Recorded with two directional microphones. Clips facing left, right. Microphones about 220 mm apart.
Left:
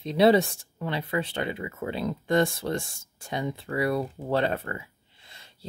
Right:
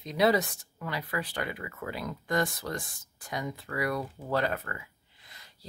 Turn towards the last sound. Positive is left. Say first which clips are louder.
# left 2 dB
turn(degrees=25)  # may be behind; listen again after turning